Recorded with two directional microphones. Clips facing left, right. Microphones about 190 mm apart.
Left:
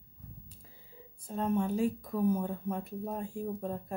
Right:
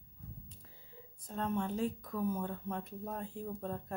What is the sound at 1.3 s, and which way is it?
Speech, 10° left (ahead or behind).